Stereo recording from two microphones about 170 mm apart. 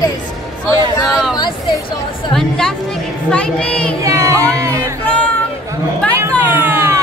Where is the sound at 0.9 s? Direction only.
20° left (ahead or behind).